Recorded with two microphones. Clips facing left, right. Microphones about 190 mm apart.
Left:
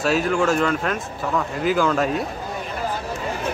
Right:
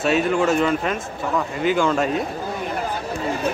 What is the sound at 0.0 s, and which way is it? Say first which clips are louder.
Speech: right 1 dB; centre (ahead or behind).